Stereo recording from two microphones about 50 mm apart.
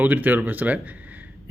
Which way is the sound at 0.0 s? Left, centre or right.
Right.